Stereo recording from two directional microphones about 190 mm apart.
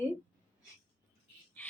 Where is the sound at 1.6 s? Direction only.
10° left (ahead or behind).